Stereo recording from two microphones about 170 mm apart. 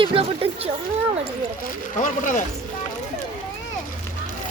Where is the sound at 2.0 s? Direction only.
50° left (ahead or behind).